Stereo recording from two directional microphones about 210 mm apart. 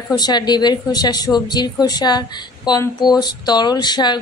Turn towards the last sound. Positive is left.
turn(degrees=20)  # may be behind; listen again after turning